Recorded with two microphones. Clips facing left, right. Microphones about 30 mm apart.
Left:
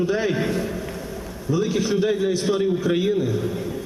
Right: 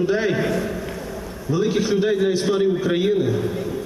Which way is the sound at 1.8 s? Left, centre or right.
Centre.